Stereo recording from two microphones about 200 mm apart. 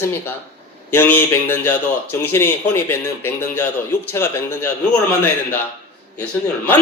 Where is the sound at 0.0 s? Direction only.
10° left (ahead or behind).